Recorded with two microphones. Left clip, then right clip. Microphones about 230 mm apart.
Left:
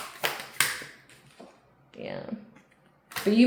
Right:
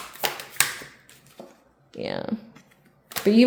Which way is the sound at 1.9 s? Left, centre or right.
Right.